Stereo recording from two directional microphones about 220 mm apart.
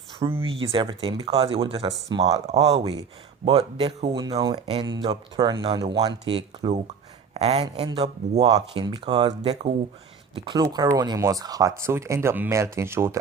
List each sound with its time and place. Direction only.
0.4 s speech: 25° right (ahead or behind)
4.1 s speech: 15° right (ahead or behind)